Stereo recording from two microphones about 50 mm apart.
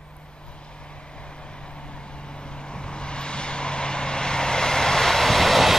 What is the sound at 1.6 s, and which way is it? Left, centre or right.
Vehicle, centre.